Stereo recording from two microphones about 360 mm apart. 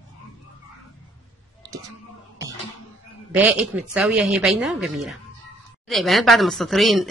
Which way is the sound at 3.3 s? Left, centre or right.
Centre.